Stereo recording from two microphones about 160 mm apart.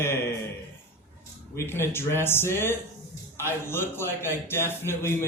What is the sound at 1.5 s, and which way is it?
A man's voice, 15° left (ahead or behind).